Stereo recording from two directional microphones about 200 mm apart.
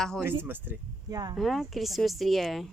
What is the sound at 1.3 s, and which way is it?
Speech, centre (ahead or behind).